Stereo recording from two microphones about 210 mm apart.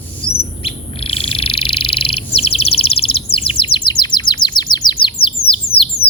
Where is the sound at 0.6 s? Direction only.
25° left (ahead or behind).